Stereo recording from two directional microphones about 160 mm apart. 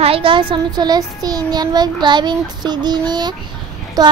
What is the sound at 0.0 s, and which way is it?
A child's voice, 35° right (ahead or behind).